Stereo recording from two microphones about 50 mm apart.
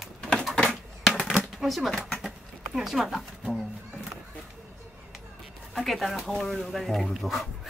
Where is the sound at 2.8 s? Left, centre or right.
Centre.